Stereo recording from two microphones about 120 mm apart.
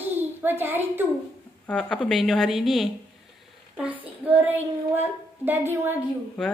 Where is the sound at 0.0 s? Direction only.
15° right (ahead or behind).